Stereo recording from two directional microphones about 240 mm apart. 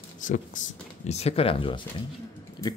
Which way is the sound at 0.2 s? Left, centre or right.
Left.